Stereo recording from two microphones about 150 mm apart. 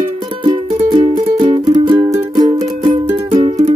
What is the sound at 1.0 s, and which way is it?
Music, 50° right (ahead or behind).